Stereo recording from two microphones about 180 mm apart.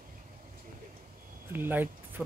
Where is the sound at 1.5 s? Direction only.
10° right (ahead or behind).